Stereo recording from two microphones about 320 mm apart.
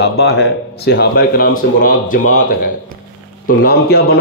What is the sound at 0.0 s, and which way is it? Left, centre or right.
Speech, left.